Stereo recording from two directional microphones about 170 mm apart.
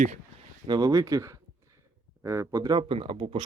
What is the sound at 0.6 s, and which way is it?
Speech, 25° right (ahead or behind).